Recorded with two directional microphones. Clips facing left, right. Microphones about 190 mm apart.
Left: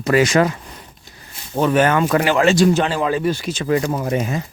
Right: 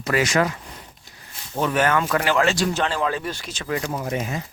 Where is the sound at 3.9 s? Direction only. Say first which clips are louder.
Left 5 dB; 60° left (ahead or behind).